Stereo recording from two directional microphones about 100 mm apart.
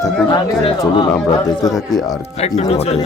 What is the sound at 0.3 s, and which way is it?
Speech, 45° left (ahead or behind).